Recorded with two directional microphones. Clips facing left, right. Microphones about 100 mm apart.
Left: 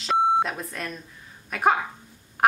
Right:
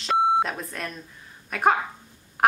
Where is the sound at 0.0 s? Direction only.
Centre (ahead or behind).